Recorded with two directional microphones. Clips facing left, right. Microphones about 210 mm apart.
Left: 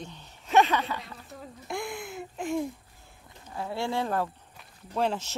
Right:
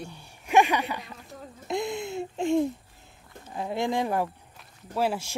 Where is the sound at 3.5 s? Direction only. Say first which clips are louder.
Right 3 dB; 20° right (ahead or behind).